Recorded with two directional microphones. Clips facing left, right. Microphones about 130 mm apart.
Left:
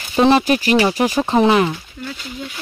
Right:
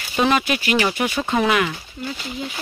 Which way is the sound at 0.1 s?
30° left (ahead or behind).